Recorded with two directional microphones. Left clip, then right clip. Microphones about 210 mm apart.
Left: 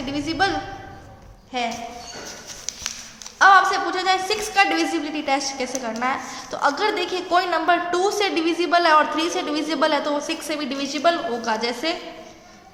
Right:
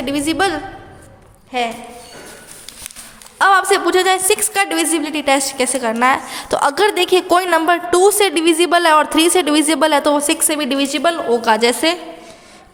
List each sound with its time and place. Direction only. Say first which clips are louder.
0.0 s a woman's voice: right 5 dB; 50° right (ahead or behind)
1.5 s a woman's voice: right 6 dB; 40° right (ahead or behind)
3.3 s a woman's voice: right 2 dB; 50° right (ahead or behind)